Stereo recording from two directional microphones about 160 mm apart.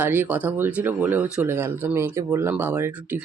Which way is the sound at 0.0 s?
10° right (ahead or behind).